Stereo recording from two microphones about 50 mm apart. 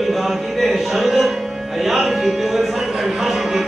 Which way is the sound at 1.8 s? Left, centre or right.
Centre.